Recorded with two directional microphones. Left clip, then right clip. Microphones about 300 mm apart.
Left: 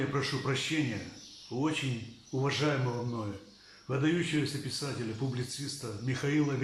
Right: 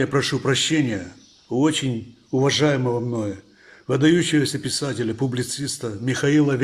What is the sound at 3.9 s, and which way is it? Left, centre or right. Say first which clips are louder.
A man's voice: right 13 dB; right.